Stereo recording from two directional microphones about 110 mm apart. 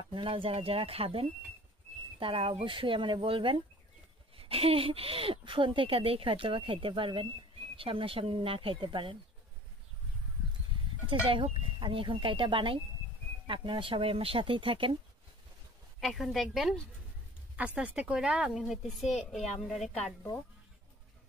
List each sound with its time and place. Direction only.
0.1 s speech: 55° right (ahead or behind)
11.2 s speech: 50° right (ahead or behind)
16.0 s a woman's voice: centre (ahead or behind)
17.7 s a woman's voice: 10° right (ahead or behind)